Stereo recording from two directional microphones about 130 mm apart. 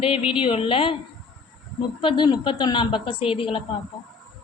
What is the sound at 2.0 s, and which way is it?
A woman's voice, 40° left (ahead or behind).